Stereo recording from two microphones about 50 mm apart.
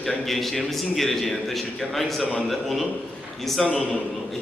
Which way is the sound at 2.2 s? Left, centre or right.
Centre.